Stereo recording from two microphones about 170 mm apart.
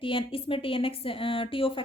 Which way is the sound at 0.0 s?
30° left (ahead or behind).